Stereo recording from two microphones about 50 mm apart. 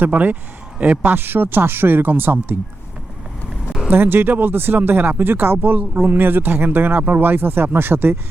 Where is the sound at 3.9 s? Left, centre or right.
Right.